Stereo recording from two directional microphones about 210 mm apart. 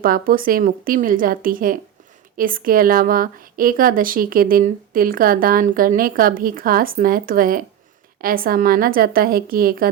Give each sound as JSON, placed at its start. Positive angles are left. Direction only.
{"t": 0.0, "sound": "a woman's voice", "side_deg": -45}